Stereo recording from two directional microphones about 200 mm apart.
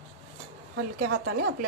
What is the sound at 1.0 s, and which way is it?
Speech, 90° right.